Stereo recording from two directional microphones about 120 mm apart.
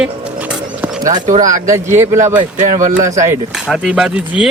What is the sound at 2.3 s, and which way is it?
Speech, 90° right.